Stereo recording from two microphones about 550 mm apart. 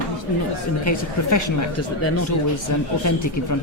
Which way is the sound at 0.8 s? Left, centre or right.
Left.